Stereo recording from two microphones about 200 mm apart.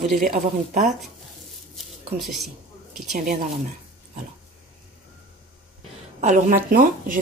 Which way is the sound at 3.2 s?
45° right (ahead or behind).